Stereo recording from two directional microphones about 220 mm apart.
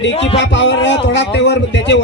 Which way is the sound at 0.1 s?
25° left (ahead or behind).